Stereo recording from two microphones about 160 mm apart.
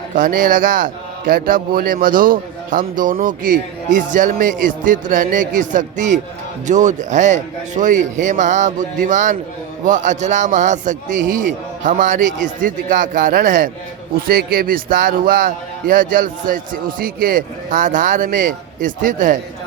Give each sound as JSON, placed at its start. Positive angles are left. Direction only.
{"t": 0.2, "sound": "a man's voice", "side_deg": -60}